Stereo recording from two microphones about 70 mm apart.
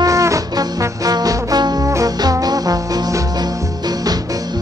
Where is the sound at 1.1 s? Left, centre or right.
Right.